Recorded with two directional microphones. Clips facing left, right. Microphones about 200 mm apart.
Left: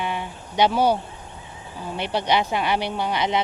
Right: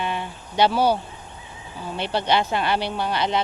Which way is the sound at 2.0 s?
15° left (ahead or behind).